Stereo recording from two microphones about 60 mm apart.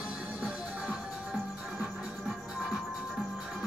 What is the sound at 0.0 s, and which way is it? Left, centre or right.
Music, centre.